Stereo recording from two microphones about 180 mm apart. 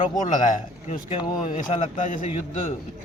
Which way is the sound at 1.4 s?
40° left (ahead or behind).